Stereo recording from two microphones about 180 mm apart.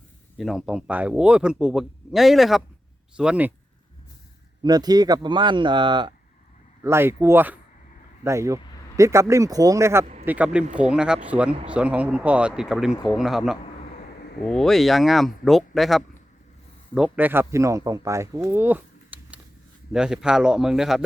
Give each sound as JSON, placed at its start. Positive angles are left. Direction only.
{"t": 0.3, "sound": "speech", "side_deg": 0}
{"t": 4.6, "sound": "speech", "side_deg": -20}
{"t": 6.8, "sound": "speech", "side_deg": -15}